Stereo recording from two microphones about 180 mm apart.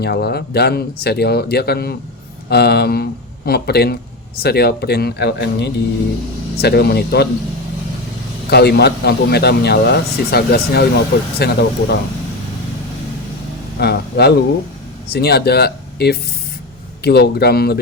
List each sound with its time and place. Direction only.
0.0 s speech: 60° left (ahead or behind)
8.4 s speech: 65° left (ahead or behind)
13.7 s speech: 60° left (ahead or behind)